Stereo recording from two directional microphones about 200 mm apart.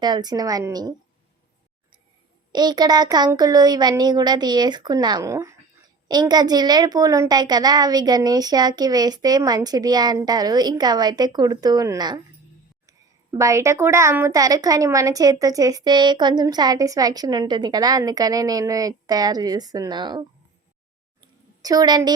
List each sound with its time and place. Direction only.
0.0 s a woman's voice: 20° right (ahead or behind)
2.5 s a woman's voice: 20° right (ahead or behind)
13.3 s a woman's voice: 15° right (ahead or behind)
21.2 s a sound: 20° right (ahead or behind)